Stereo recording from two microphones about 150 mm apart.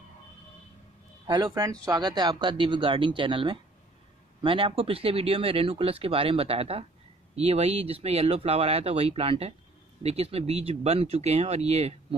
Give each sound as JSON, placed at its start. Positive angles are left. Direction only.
{"t": 1.2, "sound": "speech", "side_deg": -25}